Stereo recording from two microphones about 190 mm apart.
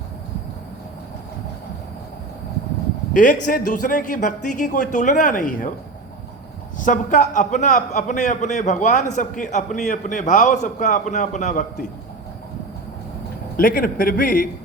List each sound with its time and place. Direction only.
3.1 s a man's voice: 45° left (ahead or behind)
6.7 s a man's voice: 40° left (ahead or behind)
13.6 s a man's voice: 50° left (ahead or behind)